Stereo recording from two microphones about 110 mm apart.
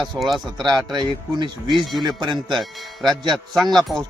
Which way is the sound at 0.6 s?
40° right (ahead or behind).